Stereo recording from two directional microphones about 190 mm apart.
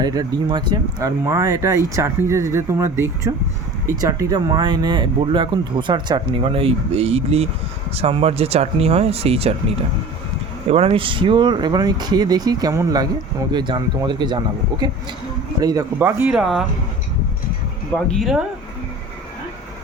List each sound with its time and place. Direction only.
0.0 s speech: 20° right (ahead or behind)
10.7 s speech: 30° right (ahead or behind); by 16.4 s 10° right (ahead or behind)
16.4 s speech: centre (ahead or behind)
17.9 s speech: 5° left (ahead or behind)